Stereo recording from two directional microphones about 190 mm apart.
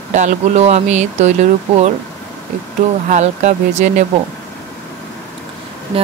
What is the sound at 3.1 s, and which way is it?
Speech, 40° right (ahead or behind).